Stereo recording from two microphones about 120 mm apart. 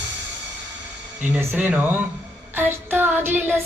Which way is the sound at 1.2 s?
20° right (ahead or behind).